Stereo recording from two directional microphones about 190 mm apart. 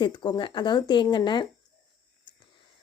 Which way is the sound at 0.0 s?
25° left (ahead or behind).